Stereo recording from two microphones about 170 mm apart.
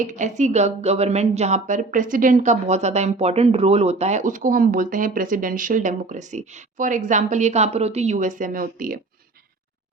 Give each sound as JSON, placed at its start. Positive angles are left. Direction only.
{"t": 0.0, "sound": "speech", "side_deg": -45}